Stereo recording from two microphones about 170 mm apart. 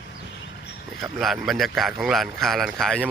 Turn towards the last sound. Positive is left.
turn(degrees=5)  # may be behind; listen again after turning